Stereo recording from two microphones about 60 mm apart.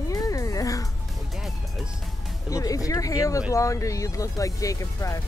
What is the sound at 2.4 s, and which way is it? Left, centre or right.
Speech, left.